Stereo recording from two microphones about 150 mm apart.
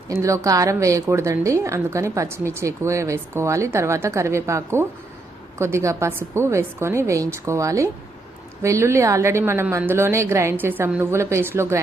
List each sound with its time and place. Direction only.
0.1 s a woman's voice: 20° right (ahead or behind)